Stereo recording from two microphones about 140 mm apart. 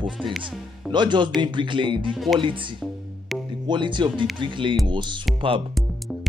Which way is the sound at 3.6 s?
35° right (ahead or behind).